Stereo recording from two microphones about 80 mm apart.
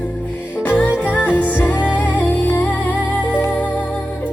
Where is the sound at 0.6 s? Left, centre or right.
Left.